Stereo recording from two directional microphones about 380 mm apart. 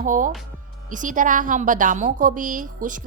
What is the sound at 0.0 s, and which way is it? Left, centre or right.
A woman's voice, right.